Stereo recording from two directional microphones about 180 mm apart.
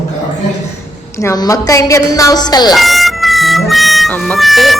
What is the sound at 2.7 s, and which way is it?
Harmonica, centre (ahead or behind).